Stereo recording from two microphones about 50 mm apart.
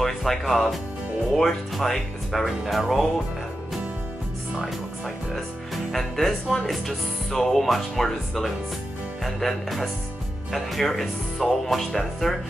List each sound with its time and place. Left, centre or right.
0.0 s speech: centre
1.8 s speech: centre
5.9 s speech: centre